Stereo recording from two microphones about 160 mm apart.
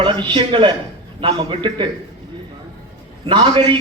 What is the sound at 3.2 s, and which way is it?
Speech, 30° right (ahead or behind).